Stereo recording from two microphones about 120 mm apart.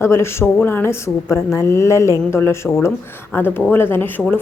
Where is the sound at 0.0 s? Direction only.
20° left (ahead or behind).